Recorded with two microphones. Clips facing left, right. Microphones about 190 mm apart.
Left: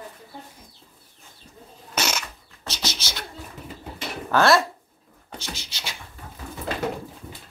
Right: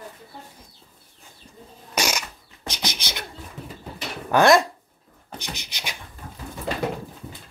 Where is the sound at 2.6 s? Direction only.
15° right (ahead or behind).